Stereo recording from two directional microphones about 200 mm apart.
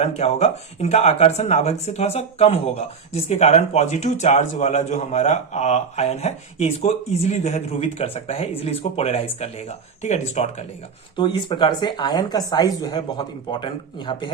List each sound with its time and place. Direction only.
0.0 s speech: 30° left (ahead or behind)